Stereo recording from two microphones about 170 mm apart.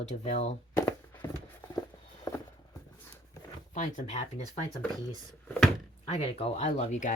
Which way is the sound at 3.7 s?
45° left (ahead or behind).